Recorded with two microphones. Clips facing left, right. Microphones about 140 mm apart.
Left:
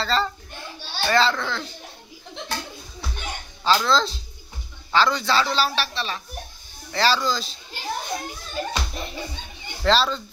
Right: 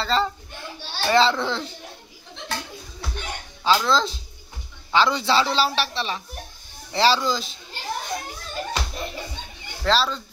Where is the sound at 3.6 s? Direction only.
10° right (ahead or behind).